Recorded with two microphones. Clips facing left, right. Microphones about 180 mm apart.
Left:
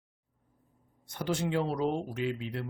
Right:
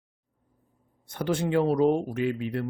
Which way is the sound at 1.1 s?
55° right (ahead or behind).